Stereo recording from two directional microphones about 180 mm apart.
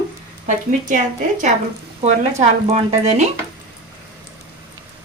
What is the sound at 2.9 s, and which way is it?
Speech, 40° right (ahead or behind).